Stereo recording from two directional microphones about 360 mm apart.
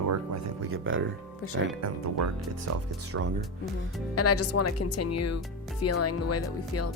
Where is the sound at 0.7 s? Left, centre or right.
Right.